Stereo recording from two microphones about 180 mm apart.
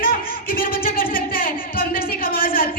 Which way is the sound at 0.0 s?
55° left (ahead or behind).